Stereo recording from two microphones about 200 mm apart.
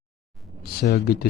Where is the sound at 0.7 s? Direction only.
50° left (ahead or behind).